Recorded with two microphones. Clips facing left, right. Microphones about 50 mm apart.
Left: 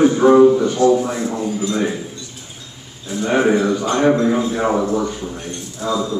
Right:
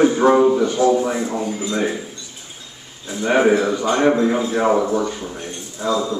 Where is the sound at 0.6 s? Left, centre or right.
Centre.